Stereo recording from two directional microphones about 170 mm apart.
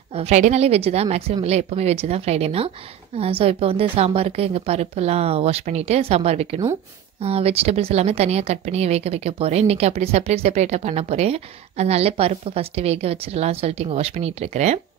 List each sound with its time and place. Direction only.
0.1 s speech: 40° right (ahead or behind)